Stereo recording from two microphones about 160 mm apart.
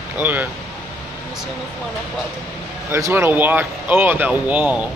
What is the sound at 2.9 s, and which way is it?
Speech, 15° right (ahead or behind).